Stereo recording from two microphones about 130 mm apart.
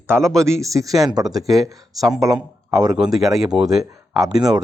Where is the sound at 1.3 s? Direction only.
Centre (ahead or behind).